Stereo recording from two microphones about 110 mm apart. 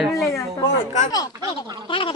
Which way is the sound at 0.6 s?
75° left (ahead or behind).